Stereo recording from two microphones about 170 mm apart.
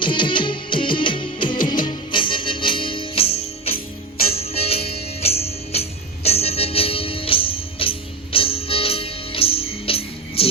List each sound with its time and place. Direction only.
0.0 s music: 30° left (ahead or behind)